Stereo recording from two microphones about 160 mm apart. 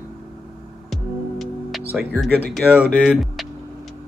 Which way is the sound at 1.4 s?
Centre (ahead or behind).